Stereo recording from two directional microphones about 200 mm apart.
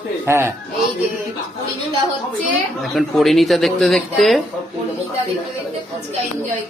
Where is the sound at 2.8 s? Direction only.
Centre (ahead or behind).